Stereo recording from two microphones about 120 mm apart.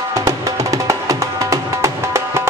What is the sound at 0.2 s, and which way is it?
Music, 25° right (ahead or behind).